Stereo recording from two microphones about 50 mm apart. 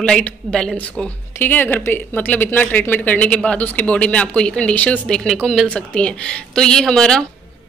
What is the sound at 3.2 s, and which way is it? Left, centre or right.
Speech, left.